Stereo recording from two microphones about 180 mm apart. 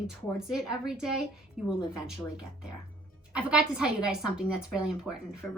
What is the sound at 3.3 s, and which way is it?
A woman's voice, 5° right (ahead or behind).